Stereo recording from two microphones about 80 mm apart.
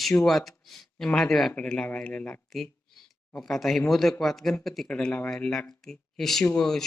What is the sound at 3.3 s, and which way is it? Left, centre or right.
Speech, centre.